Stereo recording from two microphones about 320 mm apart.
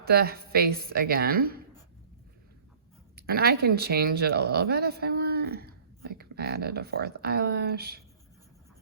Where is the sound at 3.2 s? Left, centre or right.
Right.